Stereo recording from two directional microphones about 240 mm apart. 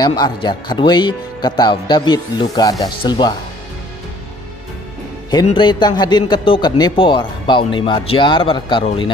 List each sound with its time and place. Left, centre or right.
0.0 s speech: centre
5.3 s a man's voice: centre